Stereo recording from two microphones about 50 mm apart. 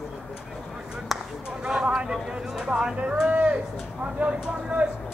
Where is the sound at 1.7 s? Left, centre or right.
Centre.